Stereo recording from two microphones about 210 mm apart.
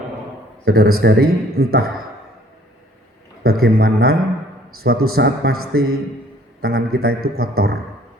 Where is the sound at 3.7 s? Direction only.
45° right (ahead or behind).